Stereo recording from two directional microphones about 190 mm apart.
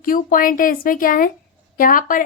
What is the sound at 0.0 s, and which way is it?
A woman's voice, 45° left (ahead or behind).